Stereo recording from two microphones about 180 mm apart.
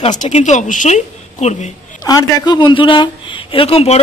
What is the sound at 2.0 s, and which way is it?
A man's voice, 20° left (ahead or behind).